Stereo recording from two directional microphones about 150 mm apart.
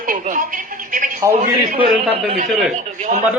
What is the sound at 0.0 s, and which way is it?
A woman's voice, 65° right (ahead or behind).